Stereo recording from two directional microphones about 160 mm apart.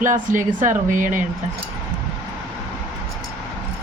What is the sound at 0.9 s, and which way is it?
Speech, 55° right (ahead or behind).